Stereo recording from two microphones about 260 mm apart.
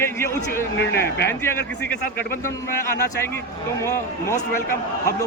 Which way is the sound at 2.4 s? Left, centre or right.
Centre.